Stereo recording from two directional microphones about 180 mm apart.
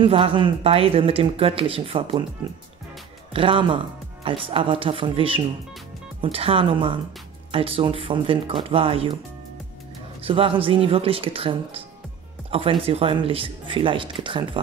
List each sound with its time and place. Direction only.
0.0 s speech: 30° right (ahead or behind)
3.3 s speech: 30° right (ahead or behind)
10.2 s speech: 30° right (ahead or behind)